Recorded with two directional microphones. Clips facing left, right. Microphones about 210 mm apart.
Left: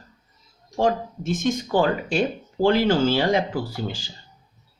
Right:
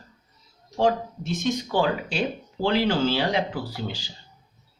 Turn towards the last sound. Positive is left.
turn(degrees=50)  # may be behind; listen again after turning